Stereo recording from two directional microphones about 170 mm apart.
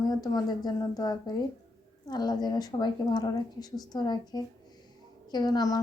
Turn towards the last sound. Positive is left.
turn(degrees=20)  # may be behind; listen again after turning